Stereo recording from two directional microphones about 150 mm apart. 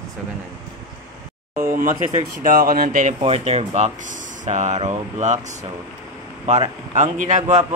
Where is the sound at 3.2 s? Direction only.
40° right (ahead or behind).